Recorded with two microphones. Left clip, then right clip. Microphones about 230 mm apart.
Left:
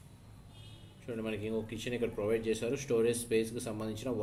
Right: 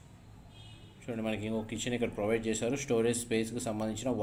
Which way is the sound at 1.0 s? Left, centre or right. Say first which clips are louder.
Right 2 dB; right.